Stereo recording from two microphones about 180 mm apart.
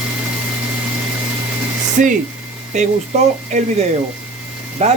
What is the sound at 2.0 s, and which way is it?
Speech, 45° right (ahead or behind).